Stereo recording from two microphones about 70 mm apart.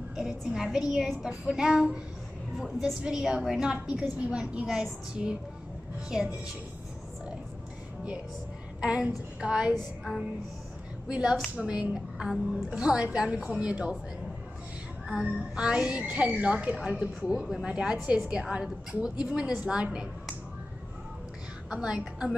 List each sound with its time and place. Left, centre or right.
0.1 s a child's voice: centre
3.0 s a woman's voice: centre
4.6 s a woman's voice: centre
5.1 s a woman's voice: centre
8.8 s a woman's voice: centre
15.0 s a woman's voice: centre
21.6 s a woman's voice: centre